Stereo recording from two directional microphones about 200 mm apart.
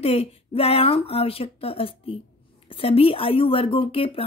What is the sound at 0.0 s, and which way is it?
A woman's voice, 30° left (ahead or behind).